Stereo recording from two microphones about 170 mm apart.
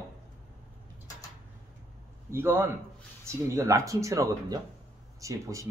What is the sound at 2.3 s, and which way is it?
Speech, 15° right (ahead or behind).